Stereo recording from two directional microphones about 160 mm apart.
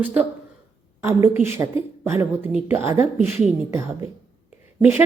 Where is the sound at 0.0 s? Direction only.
10° right (ahead or behind).